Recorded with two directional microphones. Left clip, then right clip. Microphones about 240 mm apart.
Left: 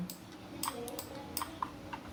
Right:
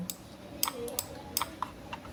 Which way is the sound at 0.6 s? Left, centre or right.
Right.